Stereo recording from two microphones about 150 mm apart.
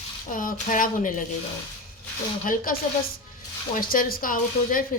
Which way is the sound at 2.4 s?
65° left (ahead or behind).